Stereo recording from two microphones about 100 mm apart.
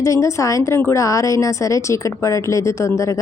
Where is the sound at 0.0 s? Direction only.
30° left (ahead or behind).